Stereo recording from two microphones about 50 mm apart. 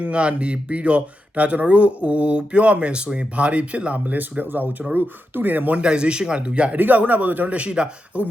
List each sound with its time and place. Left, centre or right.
0.0 s speech: right
5.7 s speech: centre
6.7 s speech: right
7.5 s speech: right